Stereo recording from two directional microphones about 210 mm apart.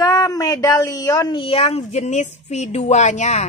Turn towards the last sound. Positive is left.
turn(degrees=35)  # may be behind; listen again after turning